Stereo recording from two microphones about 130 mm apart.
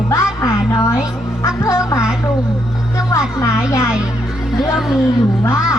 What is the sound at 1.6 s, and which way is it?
Music, 25° left (ahead or behind).